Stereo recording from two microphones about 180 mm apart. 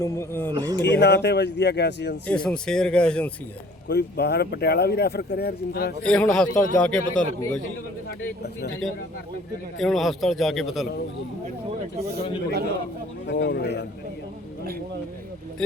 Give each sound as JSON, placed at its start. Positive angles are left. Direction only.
{"t": 0.0, "sound": "speech", "side_deg": 15}
{"t": 0.5, "sound": "speech", "side_deg": -20}
{"t": 0.8, "sound": "speech", "side_deg": 70}
{"t": 2.2, "sound": "a man's voice", "side_deg": 5}
{"t": 3.8, "sound": "speech", "side_deg": 65}
{"t": 6.1, "sound": "a man's voice", "side_deg": 5}
{"t": 9.7, "sound": "a man's voice", "side_deg": 0}
{"t": 13.2, "sound": "speech", "side_deg": 75}